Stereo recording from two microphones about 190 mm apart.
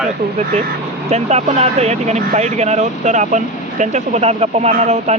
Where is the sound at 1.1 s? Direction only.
35° right (ahead or behind).